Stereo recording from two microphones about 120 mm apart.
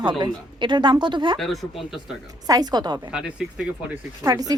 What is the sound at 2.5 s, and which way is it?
Speech, 35° right (ahead or behind).